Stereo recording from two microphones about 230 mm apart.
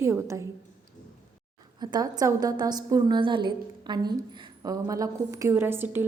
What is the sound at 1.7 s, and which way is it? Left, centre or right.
A woman's voice, centre.